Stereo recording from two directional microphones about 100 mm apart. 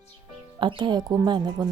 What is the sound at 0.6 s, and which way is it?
Speech, 55° right (ahead or behind).